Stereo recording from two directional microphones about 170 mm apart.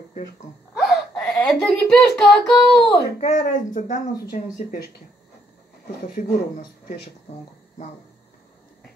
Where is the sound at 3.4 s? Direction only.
50° left (ahead or behind).